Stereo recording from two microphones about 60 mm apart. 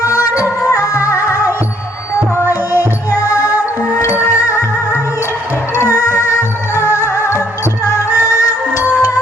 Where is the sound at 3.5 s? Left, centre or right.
Right.